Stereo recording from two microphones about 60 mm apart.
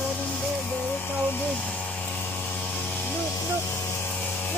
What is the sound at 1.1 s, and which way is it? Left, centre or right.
Speech, left.